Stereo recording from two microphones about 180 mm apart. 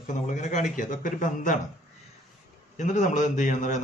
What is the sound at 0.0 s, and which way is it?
A man's voice, 45° left (ahead or behind).